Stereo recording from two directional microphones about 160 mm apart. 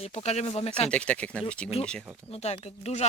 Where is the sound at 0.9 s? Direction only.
5° left (ahead or behind).